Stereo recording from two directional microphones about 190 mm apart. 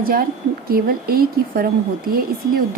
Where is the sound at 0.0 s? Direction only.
50° right (ahead or behind).